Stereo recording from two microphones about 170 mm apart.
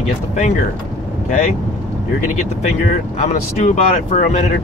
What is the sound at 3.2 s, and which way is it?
Speech, 40° left (ahead or behind).